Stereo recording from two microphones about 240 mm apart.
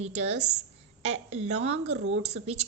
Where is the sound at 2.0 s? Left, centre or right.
Right.